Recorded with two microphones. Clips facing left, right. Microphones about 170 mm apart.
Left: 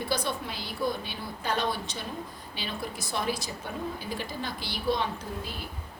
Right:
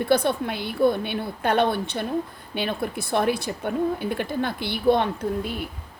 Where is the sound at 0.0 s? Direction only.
55° right (ahead or behind).